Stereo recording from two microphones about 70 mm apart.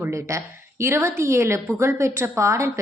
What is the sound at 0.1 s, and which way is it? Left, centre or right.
A woman's voice, right.